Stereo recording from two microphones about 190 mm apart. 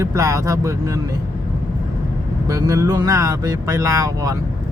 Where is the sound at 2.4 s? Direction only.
15° right (ahead or behind).